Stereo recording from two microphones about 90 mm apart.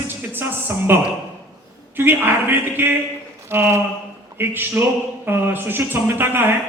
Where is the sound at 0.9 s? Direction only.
25° right (ahead or behind).